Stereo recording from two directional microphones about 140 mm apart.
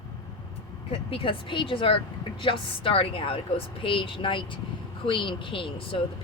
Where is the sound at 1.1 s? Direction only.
40° left (ahead or behind).